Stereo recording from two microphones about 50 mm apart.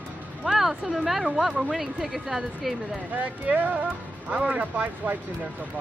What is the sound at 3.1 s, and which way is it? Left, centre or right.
Speech, right.